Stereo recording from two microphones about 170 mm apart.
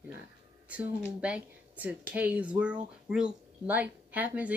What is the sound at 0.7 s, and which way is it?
A woman's voice, 5° right (ahead or behind).